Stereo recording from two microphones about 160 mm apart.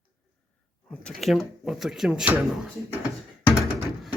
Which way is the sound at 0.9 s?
5° left (ahead or behind).